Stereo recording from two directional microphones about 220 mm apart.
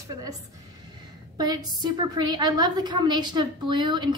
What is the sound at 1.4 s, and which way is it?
A woman's voice, 20° right (ahead or behind).